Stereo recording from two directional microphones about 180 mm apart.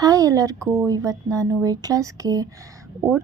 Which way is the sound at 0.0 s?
20° right (ahead or behind).